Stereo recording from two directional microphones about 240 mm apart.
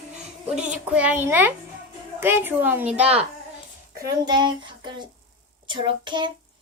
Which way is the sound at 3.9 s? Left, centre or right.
Centre.